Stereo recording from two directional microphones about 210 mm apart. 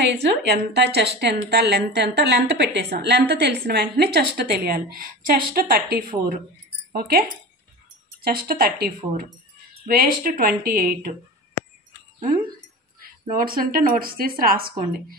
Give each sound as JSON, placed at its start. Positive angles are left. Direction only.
{"t": 0.2, "sound": "a woman's voice", "side_deg": -50}
{"t": 13.0, "sound": "a woman's voice", "side_deg": -45}